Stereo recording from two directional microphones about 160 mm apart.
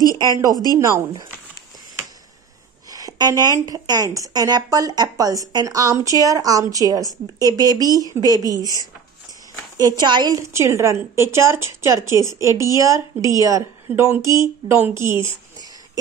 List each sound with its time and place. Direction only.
0.5 s speech: 25° left (ahead or behind)
0.7 s a woman's voice: 20° right (ahead or behind)
2.9 s a woman's voice: 25° right (ahead or behind)
9.8 s a woman's voice: 25° right (ahead or behind)